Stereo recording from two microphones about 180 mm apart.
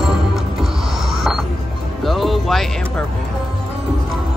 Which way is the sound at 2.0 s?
Centre (ahead or behind).